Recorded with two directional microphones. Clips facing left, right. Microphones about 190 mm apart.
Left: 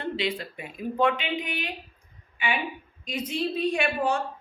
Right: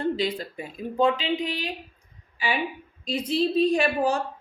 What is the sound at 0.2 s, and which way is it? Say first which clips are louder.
A woman's voice: right 2 dB; 35° right (ahead or behind).